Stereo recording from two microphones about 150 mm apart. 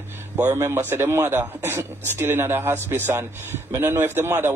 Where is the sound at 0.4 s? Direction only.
20° right (ahead or behind).